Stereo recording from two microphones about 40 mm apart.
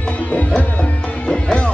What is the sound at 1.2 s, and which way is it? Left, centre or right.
Music, left.